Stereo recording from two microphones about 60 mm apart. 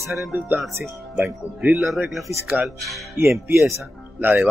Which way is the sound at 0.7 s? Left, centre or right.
Right.